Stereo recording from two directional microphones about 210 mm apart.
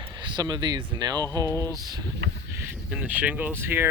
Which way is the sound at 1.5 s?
15° left (ahead or behind).